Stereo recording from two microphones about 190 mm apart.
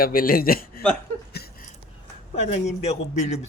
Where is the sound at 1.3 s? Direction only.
55° left (ahead or behind).